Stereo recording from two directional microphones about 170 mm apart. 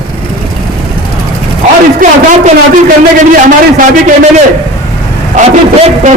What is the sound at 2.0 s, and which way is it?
Speech, 55° right (ahead or behind).